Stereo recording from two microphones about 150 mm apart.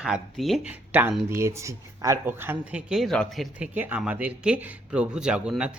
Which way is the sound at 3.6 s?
10° right (ahead or behind).